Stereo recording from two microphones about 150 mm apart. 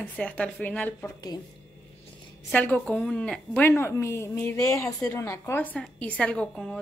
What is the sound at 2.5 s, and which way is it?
A woman's voice, 10° left (ahead or behind).